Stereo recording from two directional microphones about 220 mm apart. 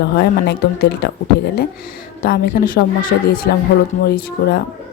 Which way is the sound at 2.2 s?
40° left (ahead or behind).